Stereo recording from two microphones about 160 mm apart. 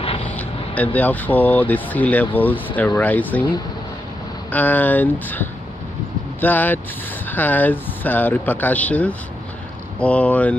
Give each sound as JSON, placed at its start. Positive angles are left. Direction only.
{"t": 0.0, "sound": "vehicle", "side_deg": 35}
{"t": 0.7, "sound": "speech", "side_deg": 10}
{"t": 4.5, "sound": "speech", "side_deg": 10}